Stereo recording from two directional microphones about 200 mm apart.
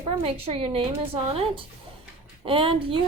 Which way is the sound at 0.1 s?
30° right (ahead or behind).